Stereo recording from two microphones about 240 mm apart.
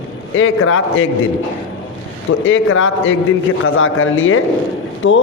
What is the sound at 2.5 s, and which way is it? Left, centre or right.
A man's voice, left.